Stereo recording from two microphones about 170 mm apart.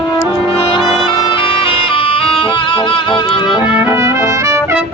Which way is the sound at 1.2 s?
30° left (ahead or behind).